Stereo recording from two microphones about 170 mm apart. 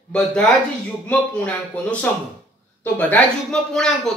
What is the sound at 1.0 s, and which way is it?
A woman's voice, 10° left (ahead or behind).